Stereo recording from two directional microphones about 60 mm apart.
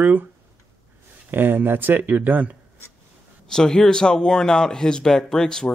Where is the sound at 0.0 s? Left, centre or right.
Right.